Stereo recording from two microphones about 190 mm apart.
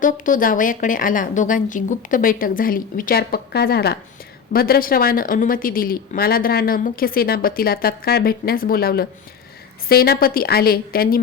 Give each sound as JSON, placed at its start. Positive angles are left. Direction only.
{"t": 0.0, "sound": "a woman's voice", "side_deg": 45}